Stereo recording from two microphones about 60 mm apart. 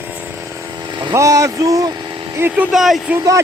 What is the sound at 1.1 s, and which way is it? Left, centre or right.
Speech, right.